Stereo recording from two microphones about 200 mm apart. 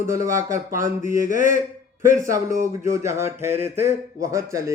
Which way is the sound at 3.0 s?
15° right (ahead or behind).